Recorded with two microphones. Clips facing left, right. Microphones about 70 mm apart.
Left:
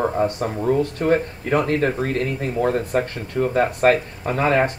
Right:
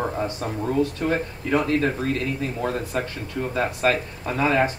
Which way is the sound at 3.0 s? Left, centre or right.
Left.